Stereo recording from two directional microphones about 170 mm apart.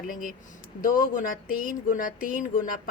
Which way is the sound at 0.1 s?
55° left (ahead or behind).